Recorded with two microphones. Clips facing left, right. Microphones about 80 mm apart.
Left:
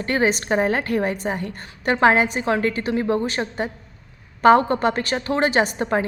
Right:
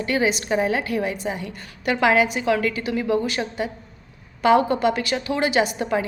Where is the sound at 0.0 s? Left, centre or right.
Left.